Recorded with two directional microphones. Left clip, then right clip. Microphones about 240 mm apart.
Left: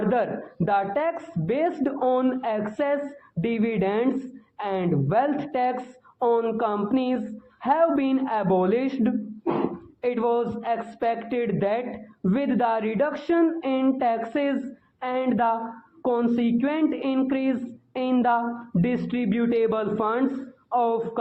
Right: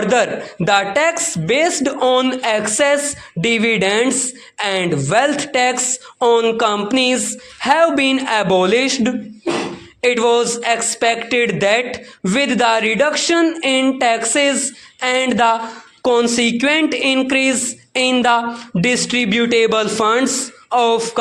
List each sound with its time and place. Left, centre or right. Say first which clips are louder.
0.1 s speech: right 9 dB; right